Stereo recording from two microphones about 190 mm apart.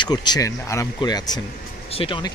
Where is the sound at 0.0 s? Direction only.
25° left (ahead or behind).